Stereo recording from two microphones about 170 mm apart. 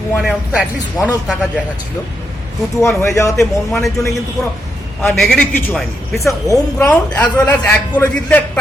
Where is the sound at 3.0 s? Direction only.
20° left (ahead or behind).